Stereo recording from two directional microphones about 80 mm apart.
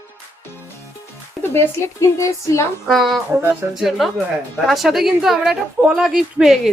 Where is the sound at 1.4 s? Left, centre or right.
Left.